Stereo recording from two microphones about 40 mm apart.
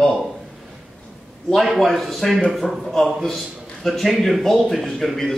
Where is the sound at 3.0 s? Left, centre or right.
Centre.